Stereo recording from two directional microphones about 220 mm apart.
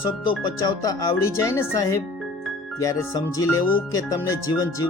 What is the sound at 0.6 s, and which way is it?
Speech, 15° left (ahead or behind).